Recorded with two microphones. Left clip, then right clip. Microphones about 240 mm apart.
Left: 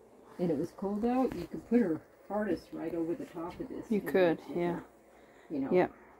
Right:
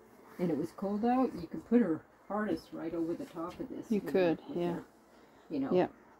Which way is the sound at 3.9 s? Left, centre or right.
Centre.